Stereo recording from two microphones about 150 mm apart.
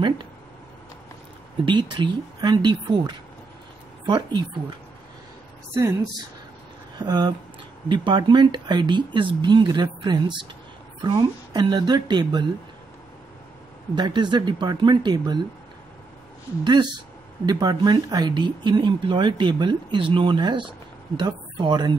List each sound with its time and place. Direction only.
1.7 s speech: 30° right (ahead or behind)
7.0 s speech: 30° right (ahead or behind)
13.9 s speech: 30° right (ahead or behind)
16.6 s speech: 30° right (ahead or behind)